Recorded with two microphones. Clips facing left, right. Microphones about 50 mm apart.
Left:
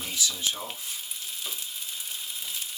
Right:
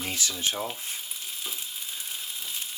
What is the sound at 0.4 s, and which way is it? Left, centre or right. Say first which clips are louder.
Speech: right 3 dB; right.